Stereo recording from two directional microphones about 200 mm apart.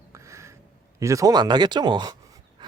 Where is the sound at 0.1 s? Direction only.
15° right (ahead or behind).